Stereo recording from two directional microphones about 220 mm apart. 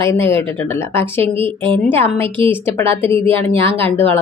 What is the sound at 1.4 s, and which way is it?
Speech, 25° right (ahead or behind).